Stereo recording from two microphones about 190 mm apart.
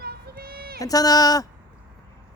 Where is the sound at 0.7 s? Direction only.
20° left (ahead or behind).